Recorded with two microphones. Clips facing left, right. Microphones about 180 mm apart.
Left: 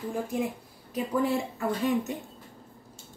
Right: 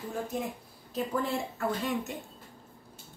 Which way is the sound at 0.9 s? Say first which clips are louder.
Left 4 dB; 15° left (ahead or behind).